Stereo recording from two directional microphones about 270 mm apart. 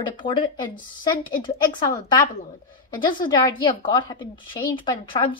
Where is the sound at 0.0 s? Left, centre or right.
Centre.